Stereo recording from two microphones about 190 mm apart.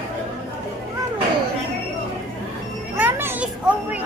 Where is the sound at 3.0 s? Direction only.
10° right (ahead or behind).